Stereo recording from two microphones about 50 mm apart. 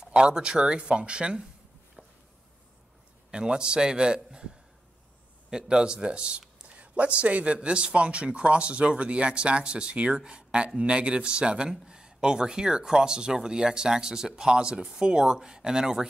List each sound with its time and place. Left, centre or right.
0.0 s speech: centre
3.3 s speech: centre
5.5 s speech: centre